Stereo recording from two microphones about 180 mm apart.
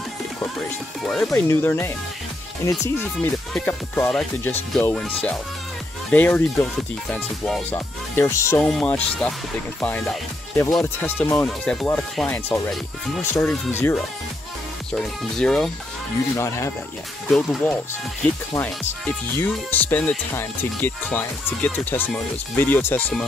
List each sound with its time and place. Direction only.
1.0 s speech: 5° left (ahead or behind)
16.3 s speech: 15° left (ahead or behind)
17.3 s speech: 5° left (ahead or behind)